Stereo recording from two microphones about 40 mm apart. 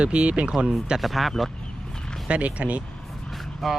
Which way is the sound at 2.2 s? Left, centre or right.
Right.